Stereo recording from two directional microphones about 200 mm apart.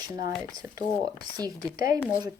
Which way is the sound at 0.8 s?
20° right (ahead or behind).